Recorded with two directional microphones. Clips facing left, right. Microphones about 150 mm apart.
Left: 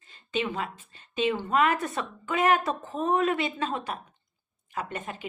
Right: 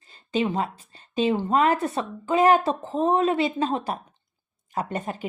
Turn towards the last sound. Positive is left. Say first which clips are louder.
# right 6 dB
turn(degrees=-35)  # may be behind; listen again after turning